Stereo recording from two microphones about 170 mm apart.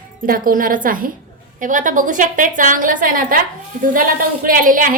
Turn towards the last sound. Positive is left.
turn(degrees=-55)  # may be behind; listen again after turning